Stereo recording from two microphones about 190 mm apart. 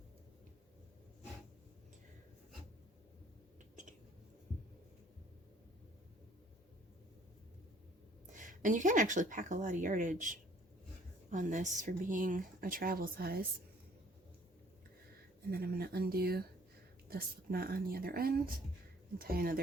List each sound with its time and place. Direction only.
8.3 s speech: 45° right (ahead or behind)
15.4 s speech: 55° right (ahead or behind)